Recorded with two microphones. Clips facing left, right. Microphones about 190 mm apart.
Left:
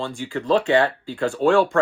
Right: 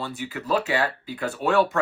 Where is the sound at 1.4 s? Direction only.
25° left (ahead or behind).